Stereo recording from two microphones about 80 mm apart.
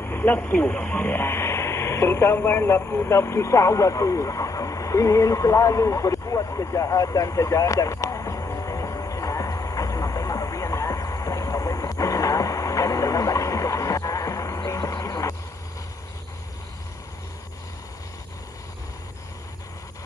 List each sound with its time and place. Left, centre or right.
0.0 s speech: left
2.3 s vehicle: left